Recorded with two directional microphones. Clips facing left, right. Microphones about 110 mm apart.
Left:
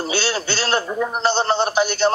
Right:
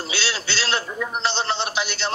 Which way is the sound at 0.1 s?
45° left (ahead or behind).